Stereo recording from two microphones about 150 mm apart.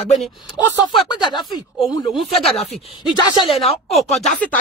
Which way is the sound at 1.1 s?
30° left (ahead or behind).